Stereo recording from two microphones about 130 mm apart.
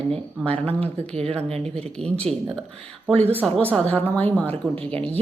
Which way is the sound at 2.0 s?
10° left (ahead or behind).